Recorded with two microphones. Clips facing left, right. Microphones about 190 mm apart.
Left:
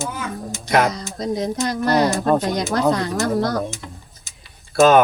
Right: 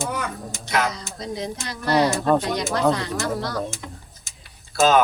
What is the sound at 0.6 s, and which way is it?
Speech, 40° left (ahead or behind).